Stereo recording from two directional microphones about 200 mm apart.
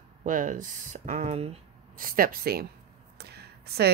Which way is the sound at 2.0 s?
45° right (ahead or behind).